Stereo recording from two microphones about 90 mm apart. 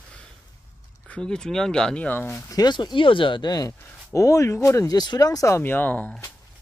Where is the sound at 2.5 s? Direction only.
50° left (ahead or behind).